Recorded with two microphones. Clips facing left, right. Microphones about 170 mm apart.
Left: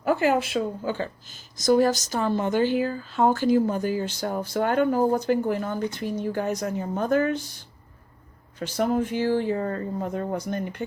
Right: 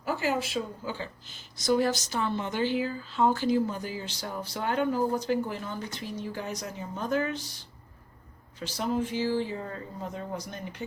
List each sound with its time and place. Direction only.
0.0 s speech: 55° left (ahead or behind)